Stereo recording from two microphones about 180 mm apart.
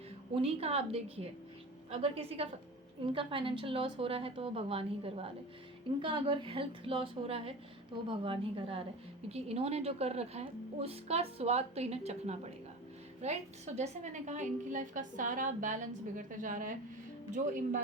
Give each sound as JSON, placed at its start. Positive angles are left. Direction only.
{"t": 0.3, "sound": "a woman's voice", "side_deg": -35}